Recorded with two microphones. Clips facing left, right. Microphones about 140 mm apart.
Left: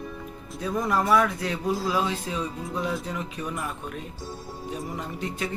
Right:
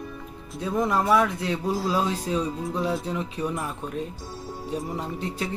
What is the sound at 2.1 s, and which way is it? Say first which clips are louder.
Speech: right 4 dB; 35° right (ahead or behind).